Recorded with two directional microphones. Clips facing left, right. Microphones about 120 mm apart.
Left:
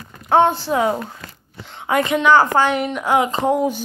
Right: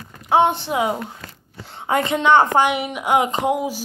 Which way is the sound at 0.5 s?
20° right (ahead or behind).